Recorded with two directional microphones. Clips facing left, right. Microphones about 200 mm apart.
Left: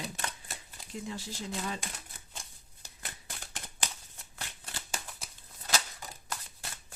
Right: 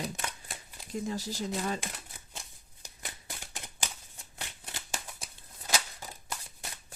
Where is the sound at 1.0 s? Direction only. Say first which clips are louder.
Right 5 dB; 40° right (ahead or behind).